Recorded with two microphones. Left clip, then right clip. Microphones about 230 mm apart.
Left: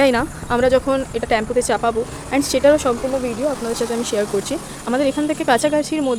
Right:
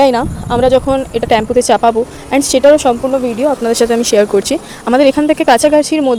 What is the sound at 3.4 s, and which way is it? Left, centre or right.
Speech, right.